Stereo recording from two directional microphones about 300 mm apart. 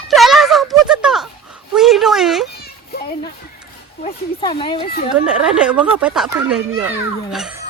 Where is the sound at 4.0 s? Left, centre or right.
Centre.